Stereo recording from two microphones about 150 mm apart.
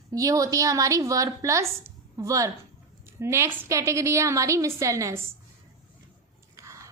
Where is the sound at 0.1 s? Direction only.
20° right (ahead or behind).